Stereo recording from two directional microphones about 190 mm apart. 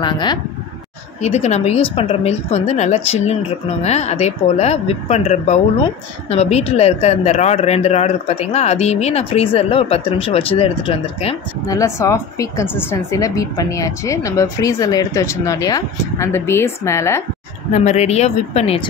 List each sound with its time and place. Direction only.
0.0 s speech: 25° left (ahead or behind)
1.2 s a woman's voice: 35° left (ahead or behind)
11.6 s speech: 15° left (ahead or behind)
17.7 s a woman's voice: 35° left (ahead or behind)